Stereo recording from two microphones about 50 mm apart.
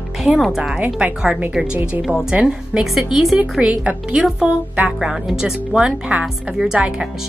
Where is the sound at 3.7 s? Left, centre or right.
Right.